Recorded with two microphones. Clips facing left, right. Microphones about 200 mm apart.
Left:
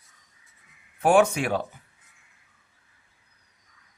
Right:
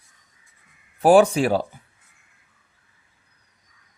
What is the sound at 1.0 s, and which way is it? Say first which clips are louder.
Speech: right 5 dB; 35° right (ahead or behind).